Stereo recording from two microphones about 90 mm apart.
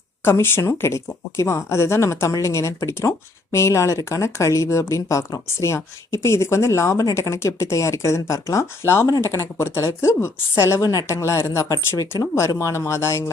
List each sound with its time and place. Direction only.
0.3 s speech: 25° left (ahead or behind)
9.0 s speech: 40° left (ahead or behind)